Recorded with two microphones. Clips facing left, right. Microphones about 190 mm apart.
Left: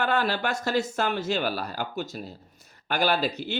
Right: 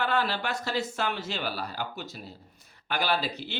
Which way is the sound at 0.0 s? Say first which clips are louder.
Left 3 dB; 45° left (ahead or behind).